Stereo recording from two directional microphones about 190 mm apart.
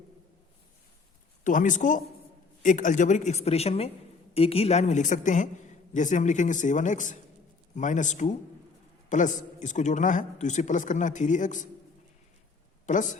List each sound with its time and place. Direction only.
1.5 s a man's voice: 40° left (ahead or behind)
12.8 s speech: 40° left (ahead or behind)